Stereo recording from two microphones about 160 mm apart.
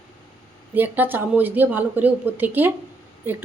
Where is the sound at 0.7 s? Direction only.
10° right (ahead or behind).